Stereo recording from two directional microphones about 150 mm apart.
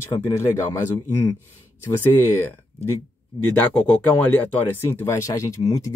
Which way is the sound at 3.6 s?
10° left (ahead or behind).